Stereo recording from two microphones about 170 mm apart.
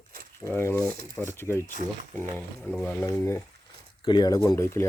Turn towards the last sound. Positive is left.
turn(degrees=15)  # may be behind; listen again after turning